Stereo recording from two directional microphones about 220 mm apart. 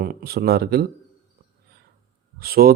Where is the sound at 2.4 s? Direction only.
45° right (ahead or behind).